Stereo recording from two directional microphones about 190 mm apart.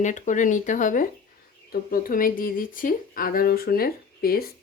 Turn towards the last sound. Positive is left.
turn(degrees=50)  # may be behind; listen again after turning